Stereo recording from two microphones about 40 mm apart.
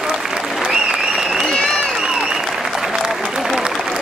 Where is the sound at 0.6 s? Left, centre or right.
Centre.